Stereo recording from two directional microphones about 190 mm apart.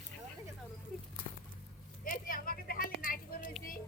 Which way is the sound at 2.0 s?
45° left (ahead or behind).